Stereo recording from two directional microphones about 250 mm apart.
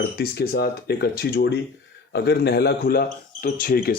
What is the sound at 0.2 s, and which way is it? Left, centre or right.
Speech, left.